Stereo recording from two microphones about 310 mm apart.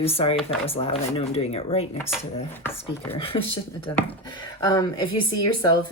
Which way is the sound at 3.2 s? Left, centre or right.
Centre.